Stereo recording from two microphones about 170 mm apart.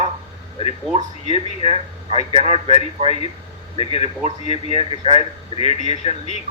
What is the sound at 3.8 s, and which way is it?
A man's voice, 35° left (ahead or behind).